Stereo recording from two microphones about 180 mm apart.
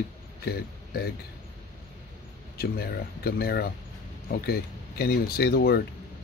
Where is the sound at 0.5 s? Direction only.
60° left (ahead or behind).